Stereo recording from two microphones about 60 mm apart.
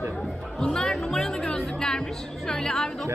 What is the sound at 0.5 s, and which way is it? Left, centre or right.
Speech, centre.